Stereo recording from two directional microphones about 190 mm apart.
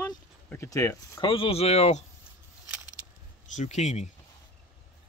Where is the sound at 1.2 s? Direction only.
30° left (ahead or behind).